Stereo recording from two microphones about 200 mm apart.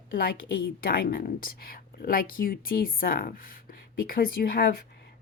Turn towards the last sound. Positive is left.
turn(degrees=50)  # may be behind; listen again after turning